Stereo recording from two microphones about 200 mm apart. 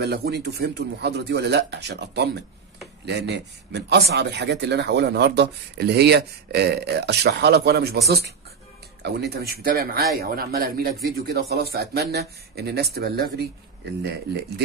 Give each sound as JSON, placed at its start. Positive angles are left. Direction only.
{"t": 0.0, "sound": "speech", "side_deg": -55}
{"t": 9.0, "sound": "speech", "side_deg": -55}